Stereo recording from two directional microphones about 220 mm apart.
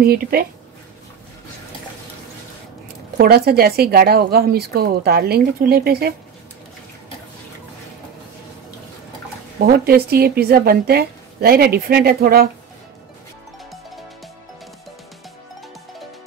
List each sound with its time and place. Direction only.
0.0 s a woman's voice: 45° right (ahead or behind)
3.2 s a woman's voice: 45° right (ahead or behind)
9.6 s a woman's voice: 45° right (ahead or behind)